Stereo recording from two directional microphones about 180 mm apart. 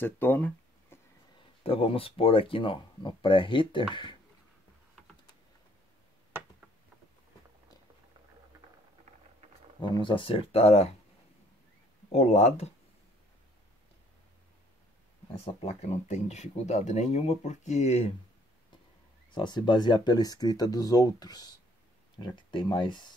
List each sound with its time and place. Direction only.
0.0 s speech: 10° left (ahead or behind)
1.6 s speech: 30° left (ahead or behind)
9.8 s speech: 25° left (ahead or behind)
12.1 s speech: 35° left (ahead or behind)
15.3 s speech: 35° left (ahead or behind)
19.3 s speech: 25° left (ahead or behind)